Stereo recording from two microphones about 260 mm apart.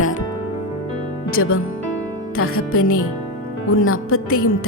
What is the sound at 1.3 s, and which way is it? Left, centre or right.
A woman's voice, left.